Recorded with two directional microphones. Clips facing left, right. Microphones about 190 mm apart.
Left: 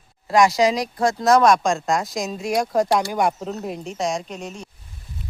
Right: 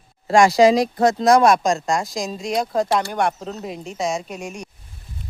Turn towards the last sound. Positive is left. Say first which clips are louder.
# right 2 dB
turn(degrees=-10)  # may be behind; listen again after turning